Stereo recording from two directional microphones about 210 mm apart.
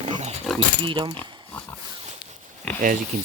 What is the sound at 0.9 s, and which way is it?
Speech, 25° right (ahead or behind).